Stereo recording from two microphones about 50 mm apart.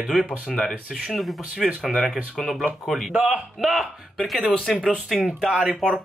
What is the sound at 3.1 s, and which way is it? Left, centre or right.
Speech, centre.